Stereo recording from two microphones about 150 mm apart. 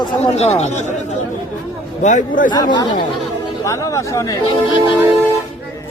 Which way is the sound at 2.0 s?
55° left (ahead or behind).